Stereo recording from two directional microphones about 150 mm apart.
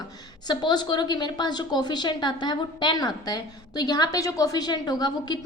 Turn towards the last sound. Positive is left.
turn(degrees=25)  # may be behind; listen again after turning